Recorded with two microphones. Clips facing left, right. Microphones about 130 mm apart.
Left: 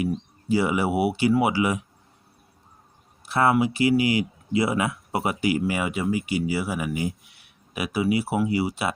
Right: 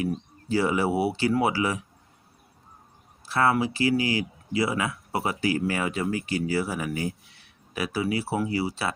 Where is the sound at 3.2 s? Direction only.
20° left (ahead or behind).